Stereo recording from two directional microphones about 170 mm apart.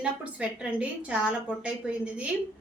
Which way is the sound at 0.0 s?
5° right (ahead or behind).